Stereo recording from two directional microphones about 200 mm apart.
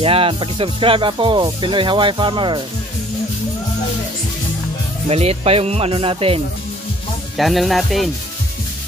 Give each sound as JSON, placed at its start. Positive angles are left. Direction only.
{"t": 0.0, "sound": "music", "side_deg": -25}
{"t": 5.0, "sound": "music", "side_deg": -30}
{"t": 7.3, "sound": "speech", "side_deg": 0}